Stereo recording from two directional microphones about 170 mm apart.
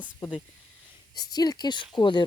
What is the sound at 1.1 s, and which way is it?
Speech, 25° left (ahead or behind).